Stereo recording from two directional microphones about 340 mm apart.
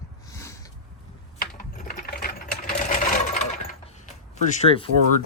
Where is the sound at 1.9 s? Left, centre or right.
Left.